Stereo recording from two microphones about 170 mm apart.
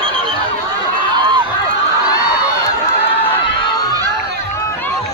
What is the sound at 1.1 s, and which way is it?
Run, 25° right (ahead or behind).